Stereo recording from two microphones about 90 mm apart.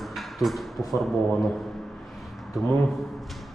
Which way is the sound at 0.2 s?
Centre (ahead or behind).